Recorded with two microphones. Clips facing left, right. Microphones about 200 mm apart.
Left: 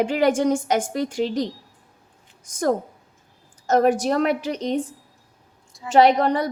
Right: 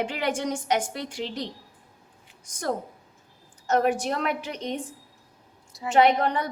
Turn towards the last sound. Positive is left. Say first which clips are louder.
# left 4 dB
turn(degrees=40)  # may be behind; listen again after turning